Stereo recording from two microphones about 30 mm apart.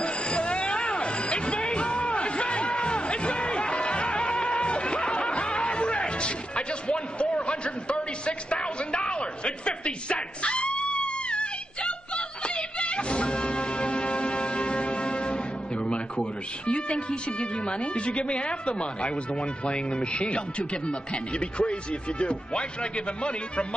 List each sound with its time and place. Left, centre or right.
0.0 s music: left
19.6 s a man's voice: left